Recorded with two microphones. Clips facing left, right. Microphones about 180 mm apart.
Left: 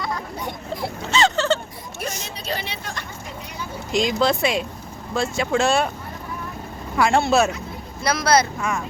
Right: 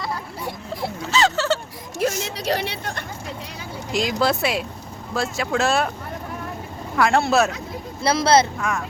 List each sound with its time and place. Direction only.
0.0 s a sound: centre (ahead or behind)
2.0 s a sound: 90° right; by 3.0 s 60° right (ahead or behind)
3.9 s speech: 5° right (ahead or behind)
6.9 s speech: centre (ahead or behind)
8.0 s speech: 25° right (ahead or behind)
8.5 s speech: centre (ahead or behind)